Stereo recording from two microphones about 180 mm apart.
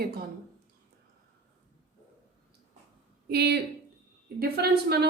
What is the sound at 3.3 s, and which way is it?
A woman's voice, 65° right (ahead or behind).